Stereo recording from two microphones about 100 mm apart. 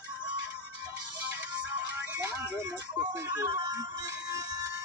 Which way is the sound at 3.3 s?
40° right (ahead or behind).